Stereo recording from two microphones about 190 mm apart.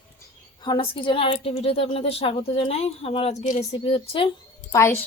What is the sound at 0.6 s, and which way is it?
A woman's voice, 25° left (ahead or behind).